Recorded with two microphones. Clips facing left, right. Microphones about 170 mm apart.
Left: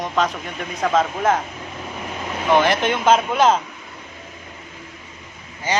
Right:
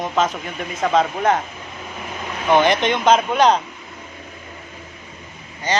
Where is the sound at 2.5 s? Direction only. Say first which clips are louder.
Right 2 dB; centre (ahead or behind).